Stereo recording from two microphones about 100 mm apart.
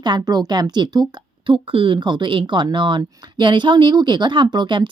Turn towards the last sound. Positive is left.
turn(degrees=-50)  # may be behind; listen again after turning